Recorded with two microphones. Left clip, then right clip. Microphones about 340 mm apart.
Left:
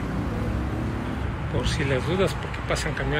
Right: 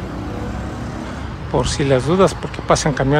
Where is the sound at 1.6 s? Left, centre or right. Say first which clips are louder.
Right 9 dB; centre.